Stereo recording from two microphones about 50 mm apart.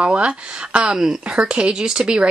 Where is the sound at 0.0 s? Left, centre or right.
Right.